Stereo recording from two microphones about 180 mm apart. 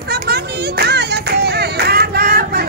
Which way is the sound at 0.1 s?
65° right (ahead or behind).